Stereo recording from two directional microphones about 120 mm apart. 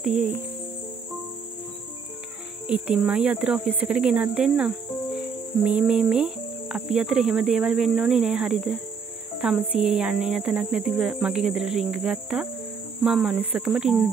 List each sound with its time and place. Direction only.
0.0 s speech: 10° right (ahead or behind)
2.6 s speech: 10° right (ahead or behind)